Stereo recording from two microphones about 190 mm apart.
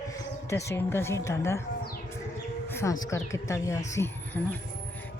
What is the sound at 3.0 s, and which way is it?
A woman's voice, 15° left (ahead or behind).